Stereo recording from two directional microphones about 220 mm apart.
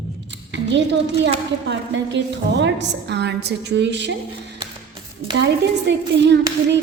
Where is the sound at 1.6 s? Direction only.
55° right (ahead or behind).